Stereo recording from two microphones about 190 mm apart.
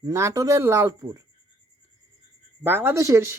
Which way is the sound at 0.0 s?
15° right (ahead or behind).